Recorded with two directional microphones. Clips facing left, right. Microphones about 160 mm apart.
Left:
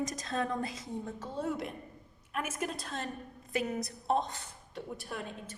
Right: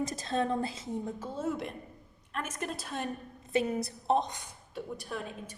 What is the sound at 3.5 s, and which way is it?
A woman's voice, 30° right (ahead or behind).